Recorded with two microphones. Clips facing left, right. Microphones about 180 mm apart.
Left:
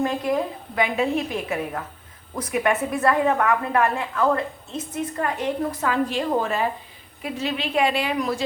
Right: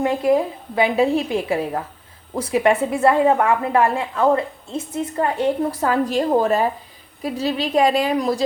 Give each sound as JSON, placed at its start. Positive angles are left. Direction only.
{"t": 0.0, "sound": "a woman's voice", "side_deg": -25}